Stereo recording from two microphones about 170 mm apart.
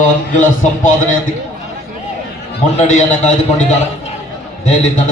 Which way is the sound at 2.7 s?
45° left (ahead or behind).